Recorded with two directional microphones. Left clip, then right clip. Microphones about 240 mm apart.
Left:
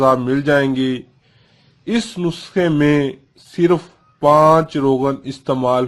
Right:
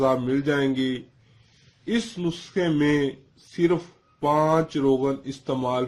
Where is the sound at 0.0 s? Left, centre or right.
Left.